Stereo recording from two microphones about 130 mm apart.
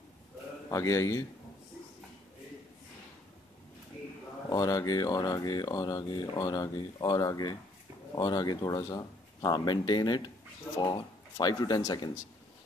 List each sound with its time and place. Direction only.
0.7 s speech: 25° left (ahead or behind)
4.5 s speech: 30° left (ahead or behind)